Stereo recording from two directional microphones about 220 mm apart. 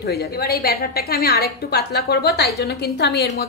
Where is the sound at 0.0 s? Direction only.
45° left (ahead or behind).